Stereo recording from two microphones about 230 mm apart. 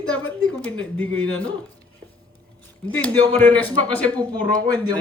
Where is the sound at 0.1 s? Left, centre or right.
Centre.